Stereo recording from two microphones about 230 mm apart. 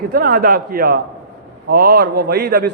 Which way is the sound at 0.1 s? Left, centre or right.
Right.